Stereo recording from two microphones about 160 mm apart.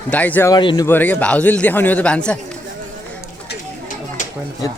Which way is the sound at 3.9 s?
50° left (ahead or behind).